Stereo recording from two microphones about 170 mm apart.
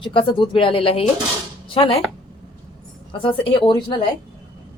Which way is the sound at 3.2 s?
30° left (ahead or behind).